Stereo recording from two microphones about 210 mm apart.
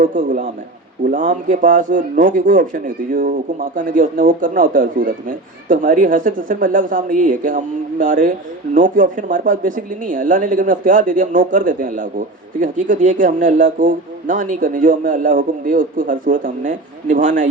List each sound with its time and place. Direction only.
0.0 s speech: 40° right (ahead or behind)